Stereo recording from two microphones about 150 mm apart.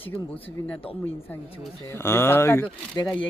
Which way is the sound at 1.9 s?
15° left (ahead or behind).